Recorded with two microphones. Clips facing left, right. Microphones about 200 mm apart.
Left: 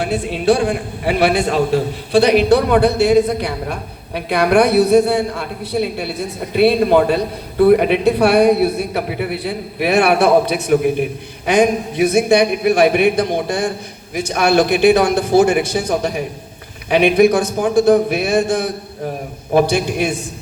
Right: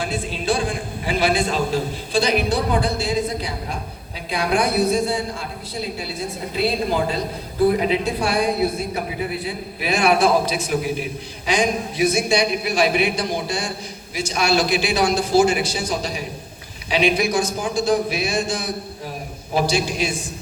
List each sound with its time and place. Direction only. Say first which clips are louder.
0.0 s a man's voice: left 8 dB; 65° left (ahead or behind)